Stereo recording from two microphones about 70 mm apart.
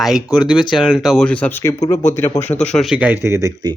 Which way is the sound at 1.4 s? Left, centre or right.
Left.